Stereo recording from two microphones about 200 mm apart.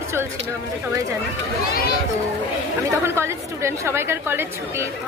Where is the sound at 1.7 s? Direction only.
50° left (ahead or behind).